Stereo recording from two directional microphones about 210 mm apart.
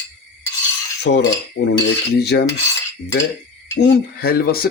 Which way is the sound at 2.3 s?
55° left (ahead or behind).